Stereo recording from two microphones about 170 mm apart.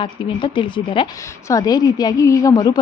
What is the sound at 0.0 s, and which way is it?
A woman's voice, 30° left (ahead or behind).